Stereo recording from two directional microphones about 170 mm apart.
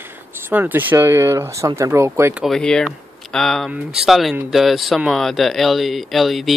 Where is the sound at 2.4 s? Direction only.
5° left (ahead or behind).